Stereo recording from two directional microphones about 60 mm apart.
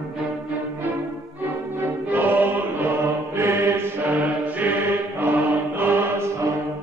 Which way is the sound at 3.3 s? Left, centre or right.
Right.